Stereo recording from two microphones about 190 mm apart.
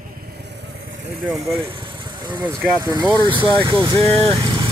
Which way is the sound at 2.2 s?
25° right (ahead or behind).